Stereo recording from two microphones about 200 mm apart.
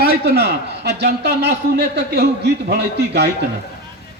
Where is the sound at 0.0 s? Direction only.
55° right (ahead or behind).